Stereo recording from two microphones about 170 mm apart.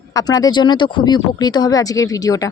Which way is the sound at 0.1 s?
20° left (ahead or behind).